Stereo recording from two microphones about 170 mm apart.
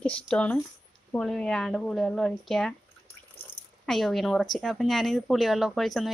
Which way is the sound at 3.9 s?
Centre (ahead or behind).